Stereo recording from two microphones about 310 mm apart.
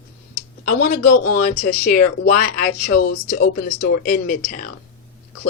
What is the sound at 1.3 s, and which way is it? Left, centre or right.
A woman's voice, left.